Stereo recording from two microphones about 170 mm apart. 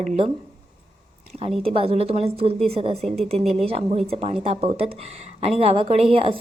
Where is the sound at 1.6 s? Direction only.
35° right (ahead or behind).